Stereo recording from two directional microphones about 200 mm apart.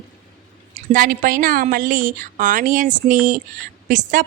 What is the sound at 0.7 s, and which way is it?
Speech, 45° right (ahead or behind).